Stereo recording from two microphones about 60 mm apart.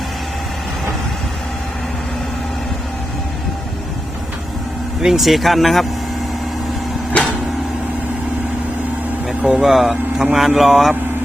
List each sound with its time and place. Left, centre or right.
5.0 s speech: centre
7.1 s vehicle: left
9.4 s speech: centre